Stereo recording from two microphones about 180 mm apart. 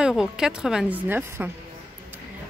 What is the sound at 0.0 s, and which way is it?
Speech, 5° right (ahead or behind).